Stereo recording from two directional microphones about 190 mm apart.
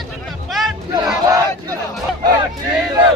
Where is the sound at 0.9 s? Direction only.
20° right (ahead or behind).